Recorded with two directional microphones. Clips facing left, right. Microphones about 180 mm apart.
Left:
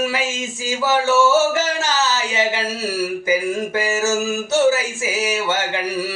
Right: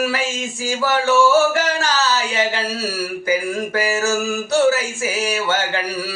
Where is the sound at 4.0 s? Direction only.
20° left (ahead or behind).